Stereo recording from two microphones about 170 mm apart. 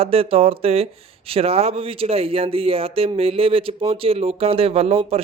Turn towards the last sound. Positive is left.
turn(degrees=-35)  # may be behind; listen again after turning